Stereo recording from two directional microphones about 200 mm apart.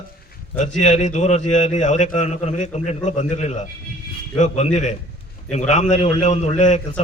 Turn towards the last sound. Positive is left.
turn(degrees=35)  # may be behind; listen again after turning